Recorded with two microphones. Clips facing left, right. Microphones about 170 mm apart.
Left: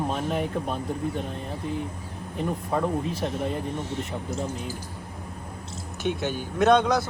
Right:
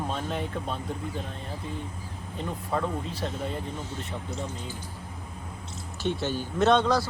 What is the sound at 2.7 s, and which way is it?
Speech, 15° left (ahead or behind).